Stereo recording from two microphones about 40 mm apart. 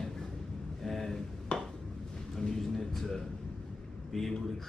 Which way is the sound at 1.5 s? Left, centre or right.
Left.